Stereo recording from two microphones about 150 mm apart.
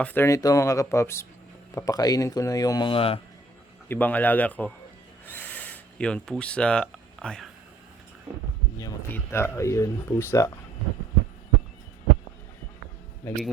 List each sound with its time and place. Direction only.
0.0 s speech: 15° left (ahead or behind); by 3.2 s 35° left (ahead or behind)
3.8 s speech: 10° left (ahead or behind)
8.8 s speech: 25° left (ahead or behind)
13.2 s speech: 15° left (ahead or behind)